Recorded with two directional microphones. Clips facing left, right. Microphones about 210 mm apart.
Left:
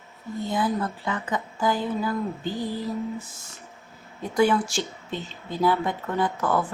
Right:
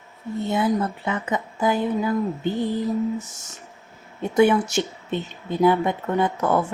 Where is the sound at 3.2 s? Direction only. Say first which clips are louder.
Right 4 dB; 80° right.